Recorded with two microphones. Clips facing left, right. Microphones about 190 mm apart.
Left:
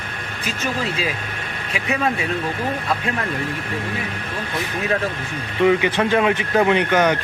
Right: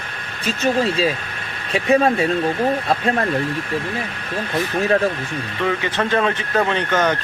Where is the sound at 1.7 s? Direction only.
35° right (ahead or behind).